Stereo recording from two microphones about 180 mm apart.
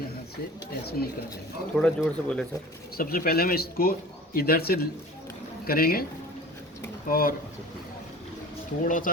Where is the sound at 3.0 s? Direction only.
55° left (ahead or behind).